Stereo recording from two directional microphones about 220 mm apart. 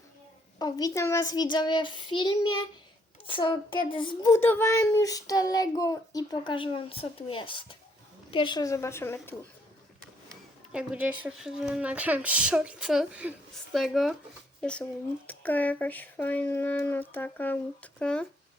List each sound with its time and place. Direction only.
0.6 s a child's voice: 15° left (ahead or behind)
10.7 s a woman's voice: 5° right (ahead or behind)